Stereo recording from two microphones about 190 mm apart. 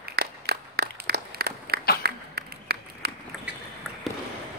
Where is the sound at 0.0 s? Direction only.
60° right (ahead or behind).